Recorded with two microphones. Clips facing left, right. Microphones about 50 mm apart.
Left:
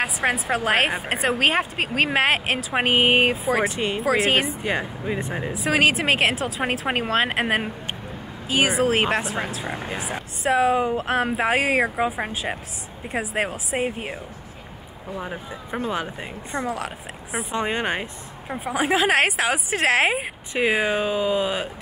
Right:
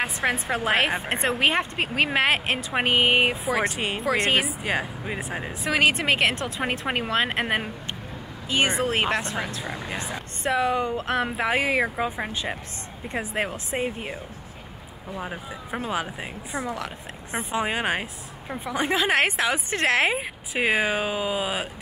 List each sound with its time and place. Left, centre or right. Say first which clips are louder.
0.0 s speech: left 2 dB; centre
0.7 s speech: left 1 dB; centre
3.4 s speech: left 3 dB; centre
8.5 s speech: left 3 dB; centre
9.7 s speech: left 3 dB; left
10.4 s speech: left 4 dB; centre
15.1 s speech: left 1 dB; centre
18.8 s speech: left 3 dB; centre